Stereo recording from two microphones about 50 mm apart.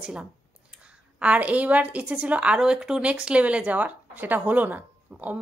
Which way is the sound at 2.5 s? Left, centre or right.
Centre.